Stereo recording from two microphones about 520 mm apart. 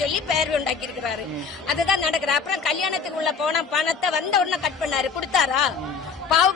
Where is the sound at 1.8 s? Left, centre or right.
Left.